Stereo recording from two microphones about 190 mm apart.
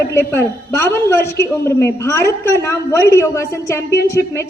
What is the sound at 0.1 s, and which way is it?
A woman's voice, 10° left (ahead or behind).